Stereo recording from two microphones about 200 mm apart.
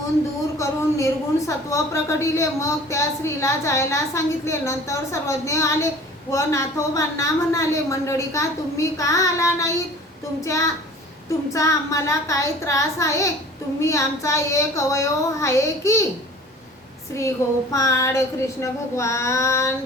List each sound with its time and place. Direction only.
0.6 s a woman's voice: 15° left (ahead or behind)
17.2 s a woman's voice: 15° left (ahead or behind)